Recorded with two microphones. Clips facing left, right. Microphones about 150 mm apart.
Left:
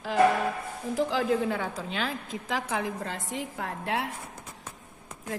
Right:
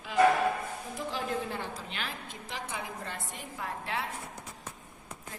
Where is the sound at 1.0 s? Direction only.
90° left.